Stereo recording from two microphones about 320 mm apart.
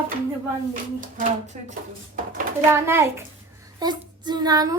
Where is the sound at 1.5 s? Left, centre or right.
Centre.